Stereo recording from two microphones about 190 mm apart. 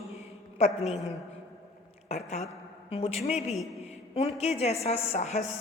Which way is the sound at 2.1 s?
35° left (ahead or behind).